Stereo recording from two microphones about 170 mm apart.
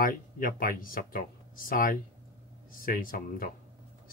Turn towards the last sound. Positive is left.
turn(degrees=55)  # may be behind; listen again after turning